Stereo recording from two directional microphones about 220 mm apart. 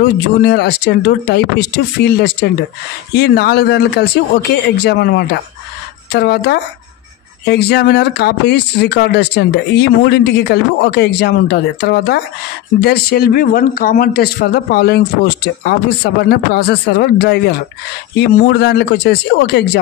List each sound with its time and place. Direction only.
0.0 s speech: 50° left (ahead or behind)